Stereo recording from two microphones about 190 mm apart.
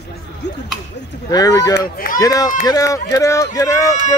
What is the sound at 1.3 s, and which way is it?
Speech, 20° left (ahead or behind).